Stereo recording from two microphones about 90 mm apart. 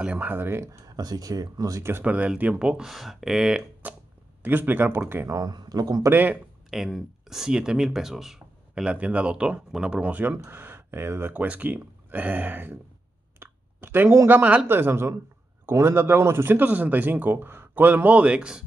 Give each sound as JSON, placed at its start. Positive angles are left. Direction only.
{"t": 0.0, "sound": "a man's voice", "side_deg": -20}
{"t": 0.8, "sound": "speech", "side_deg": -45}
{"t": 1.8, "sound": "speech", "side_deg": -25}
{"t": 3.8, "sound": "a man's voice", "side_deg": -20}
{"t": 5.3, "sound": "speech", "side_deg": -50}
{"t": 6.0, "sound": "a man's voice", "side_deg": -20}
{"t": 6.7, "sound": "speech", "side_deg": -5}
{"t": 14.7, "sound": "a man's voice", "side_deg": -25}